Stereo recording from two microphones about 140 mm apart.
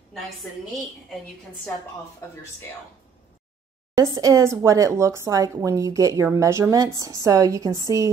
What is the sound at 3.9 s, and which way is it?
A woman's voice, 25° right (ahead or behind).